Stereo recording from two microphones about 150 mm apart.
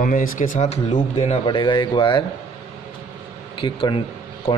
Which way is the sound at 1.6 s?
30° left (ahead or behind).